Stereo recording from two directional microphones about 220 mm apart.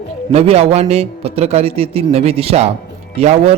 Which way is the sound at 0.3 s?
30° right (ahead or behind).